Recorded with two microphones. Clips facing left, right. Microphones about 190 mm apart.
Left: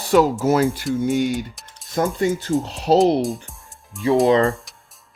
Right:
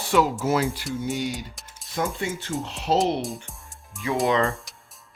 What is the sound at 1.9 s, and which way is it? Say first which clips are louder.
Speech: left 8 dB; 40° left (ahead or behind).